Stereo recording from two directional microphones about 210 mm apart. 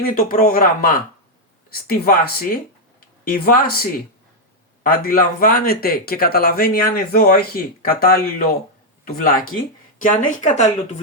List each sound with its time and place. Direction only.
0.0 s speech: 40° left (ahead or behind)
4.8 s speech: 45° left (ahead or behind)